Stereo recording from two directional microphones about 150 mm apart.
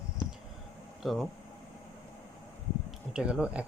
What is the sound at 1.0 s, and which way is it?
Speech, centre (ahead or behind).